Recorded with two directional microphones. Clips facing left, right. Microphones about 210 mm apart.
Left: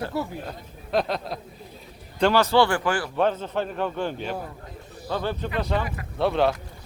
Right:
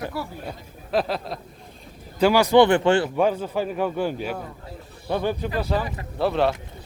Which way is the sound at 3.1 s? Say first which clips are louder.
Right 2 dB; 10° right (ahead or behind).